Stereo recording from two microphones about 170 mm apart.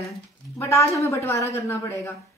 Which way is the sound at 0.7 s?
15° left (ahead or behind).